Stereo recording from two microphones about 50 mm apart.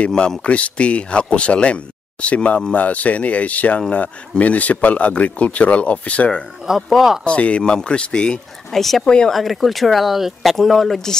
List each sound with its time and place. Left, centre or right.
0.4 s speech: left
6.6 s speech: centre
7.2 s speech: left
9.3 s speech: centre